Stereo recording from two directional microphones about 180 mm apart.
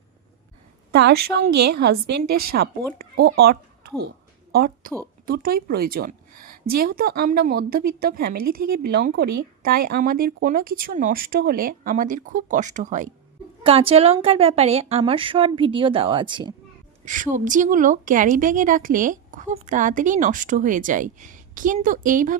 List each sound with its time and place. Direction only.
0.9 s a woman's voice: 65° right (ahead or behind); by 13.1 s 45° right (ahead or behind)
13.7 s a woman's voice: 30° right (ahead or behind)
17.1 s a woman's voice: 45° right (ahead or behind)